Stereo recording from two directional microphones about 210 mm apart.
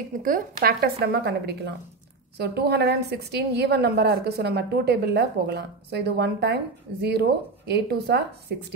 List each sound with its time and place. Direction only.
0.2 s a woman's voice: 40° right (ahead or behind)